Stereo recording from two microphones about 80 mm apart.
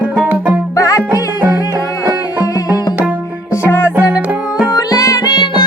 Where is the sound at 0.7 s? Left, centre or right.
Left.